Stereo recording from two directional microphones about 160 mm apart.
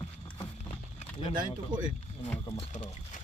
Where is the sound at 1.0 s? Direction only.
40° left (ahead or behind).